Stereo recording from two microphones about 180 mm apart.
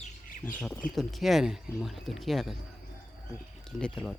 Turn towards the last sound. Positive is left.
turn(degrees=5)  # may be behind; listen again after turning